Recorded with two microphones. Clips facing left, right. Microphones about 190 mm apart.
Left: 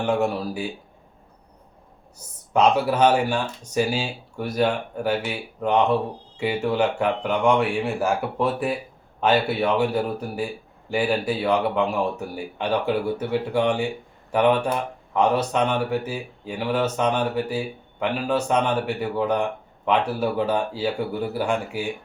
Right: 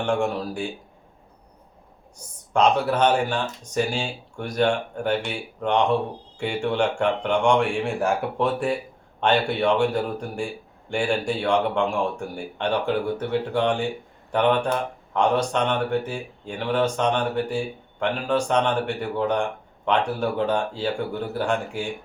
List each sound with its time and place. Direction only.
0.0 s speech: 5° left (ahead or behind)
2.1 s speech: 5° left (ahead or behind)